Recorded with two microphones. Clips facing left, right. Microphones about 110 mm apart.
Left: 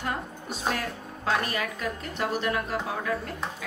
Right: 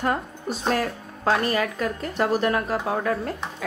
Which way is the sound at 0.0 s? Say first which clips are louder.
Right 7 dB; 45° right (ahead or behind).